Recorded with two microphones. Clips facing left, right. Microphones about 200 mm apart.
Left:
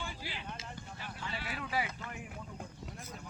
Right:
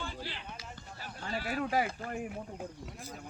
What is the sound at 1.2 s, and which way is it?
Speech, 40° right (ahead or behind).